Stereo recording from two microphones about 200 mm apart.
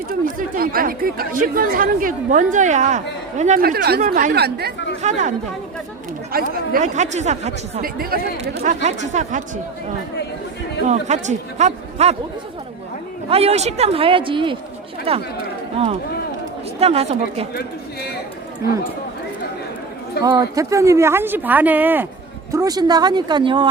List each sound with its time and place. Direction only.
0.1 s speech: 45° right (ahead or behind)
5.0 s speech: 35° right (ahead or behind)
6.3 s speech: 40° right (ahead or behind)
10.8 s speech: 35° right (ahead or behind)
13.3 s a woman's voice: 30° right (ahead or behind)
16.8 s speech: 30° right (ahead or behind)
20.2 s a woman's voice: 20° right (ahead or behind)